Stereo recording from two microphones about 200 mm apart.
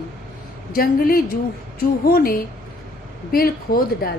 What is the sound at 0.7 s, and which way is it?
A woman's voice, 45° left (ahead or behind).